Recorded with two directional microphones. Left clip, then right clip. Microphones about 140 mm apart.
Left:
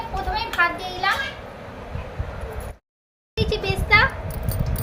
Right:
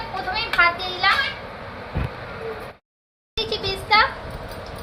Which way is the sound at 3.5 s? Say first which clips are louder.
Left 1 dB; 70° left (ahead or behind).